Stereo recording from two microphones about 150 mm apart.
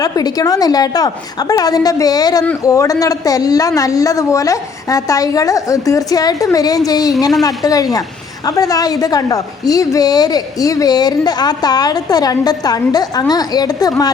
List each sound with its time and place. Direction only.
0.0 s a woman's voice: 25° left (ahead or behind)